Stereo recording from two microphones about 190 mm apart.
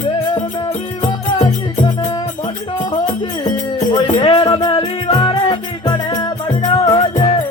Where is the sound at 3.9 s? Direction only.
25° left (ahead or behind).